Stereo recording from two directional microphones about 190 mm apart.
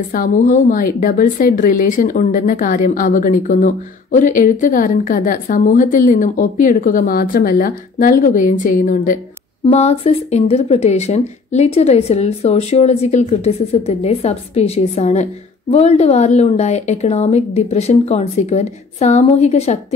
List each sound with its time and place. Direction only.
0.1 s a woman's voice: 45° left (ahead or behind)
9.7 s speech: 35° left (ahead or behind)